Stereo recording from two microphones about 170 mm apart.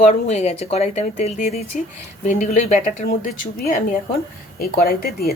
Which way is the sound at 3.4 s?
55° left (ahead or behind).